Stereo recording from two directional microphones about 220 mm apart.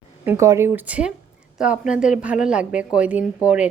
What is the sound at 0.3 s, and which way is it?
Speech, 15° right (ahead or behind).